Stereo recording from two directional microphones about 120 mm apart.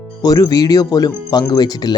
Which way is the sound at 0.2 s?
30° left (ahead or behind).